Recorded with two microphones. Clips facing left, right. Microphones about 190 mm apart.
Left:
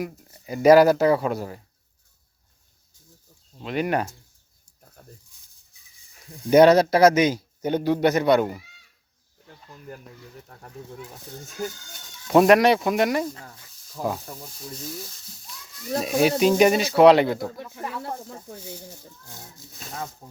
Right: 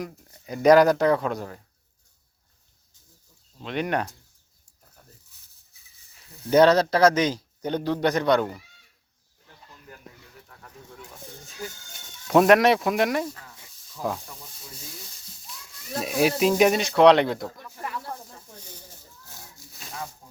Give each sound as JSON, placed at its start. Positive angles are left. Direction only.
{"t": 0.0, "sound": "speech", "side_deg": 5}
{"t": 3.6, "sound": "speech", "side_deg": 5}
{"t": 6.4, "sound": "a man's voice", "side_deg": 10}
{"t": 10.5, "sound": "speech", "side_deg": 40}
{"t": 12.3, "sound": "speech", "side_deg": 0}
{"t": 14.0, "sound": "speech", "side_deg": 50}
{"t": 16.0, "sound": "speech", "side_deg": 0}
{"t": 17.8, "sound": "speech", "side_deg": 65}
{"t": 19.2, "sound": "a sound", "side_deg": 20}